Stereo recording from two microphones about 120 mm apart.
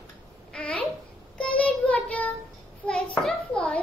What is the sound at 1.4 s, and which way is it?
Child singing, 10° left (ahead or behind).